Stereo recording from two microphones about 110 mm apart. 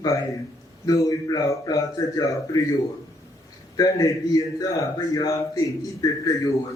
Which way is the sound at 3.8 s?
35° left (ahead or behind).